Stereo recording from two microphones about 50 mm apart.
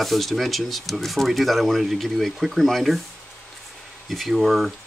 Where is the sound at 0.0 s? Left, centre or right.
Centre.